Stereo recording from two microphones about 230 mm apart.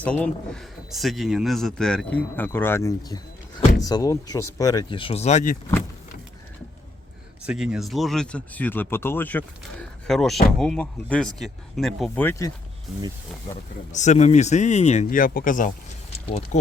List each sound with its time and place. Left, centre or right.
0.0 s speech: centre; by 5.5 s left
7.4 s speech: centre
13.9 s speech: left